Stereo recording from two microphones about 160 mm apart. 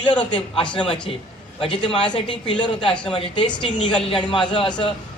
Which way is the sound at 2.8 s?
5° left (ahead or behind).